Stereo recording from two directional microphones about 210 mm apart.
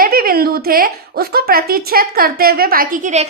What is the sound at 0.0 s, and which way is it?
A woman's voice, 45° right (ahead or behind).